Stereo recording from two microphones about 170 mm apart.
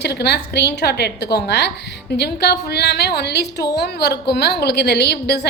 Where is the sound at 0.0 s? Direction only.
75° left (ahead or behind).